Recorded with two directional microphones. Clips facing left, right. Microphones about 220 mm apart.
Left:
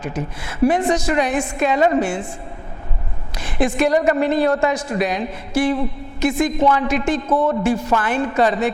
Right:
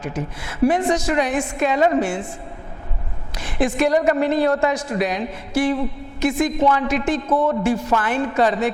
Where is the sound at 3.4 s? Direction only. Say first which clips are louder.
Left 1 dB; 15° left (ahead or behind).